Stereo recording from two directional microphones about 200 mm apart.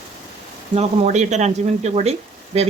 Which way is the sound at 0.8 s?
35° right (ahead or behind).